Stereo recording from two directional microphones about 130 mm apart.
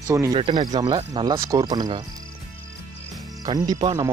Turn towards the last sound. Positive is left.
turn(degrees=-30)  # may be behind; listen again after turning